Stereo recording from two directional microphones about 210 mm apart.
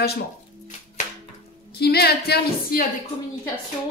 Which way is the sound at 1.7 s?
50° left (ahead or behind).